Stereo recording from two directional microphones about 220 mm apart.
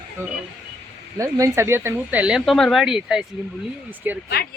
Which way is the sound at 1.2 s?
15° right (ahead or behind).